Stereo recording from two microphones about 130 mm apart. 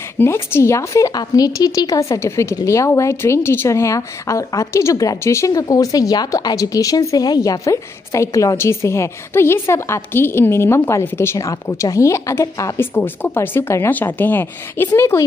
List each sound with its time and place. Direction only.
0.2 s a woman's voice: 20° left (ahead or behind)